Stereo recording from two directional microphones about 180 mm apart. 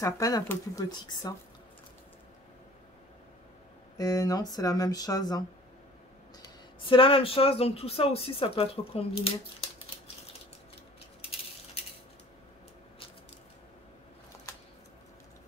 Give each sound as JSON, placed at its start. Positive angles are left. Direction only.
{"t": 0.0, "sound": "speech", "side_deg": 20}
{"t": 4.0, "sound": "speech", "side_deg": 20}
{"t": 6.4, "sound": "speech", "side_deg": 25}